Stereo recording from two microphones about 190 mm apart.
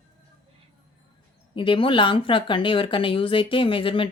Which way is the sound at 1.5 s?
25° left (ahead or behind).